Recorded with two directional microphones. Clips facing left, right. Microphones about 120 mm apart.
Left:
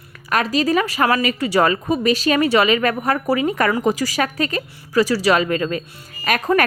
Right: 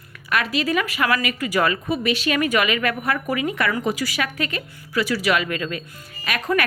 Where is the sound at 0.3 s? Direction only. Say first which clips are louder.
Left 4 dB; 35° left (ahead or behind).